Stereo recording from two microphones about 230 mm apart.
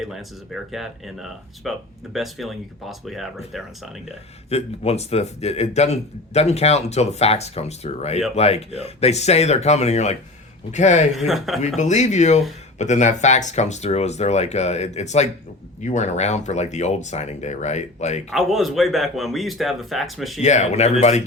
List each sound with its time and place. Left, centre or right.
0.0 s speech: centre
4.4 s speech: left
11.3 s speech: centre
11.8 s speech: left
18.3 s speech: centre
20.4 s speech: left